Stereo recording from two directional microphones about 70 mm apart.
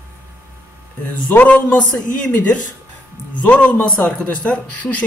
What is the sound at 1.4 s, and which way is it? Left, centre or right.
A man's voice, left.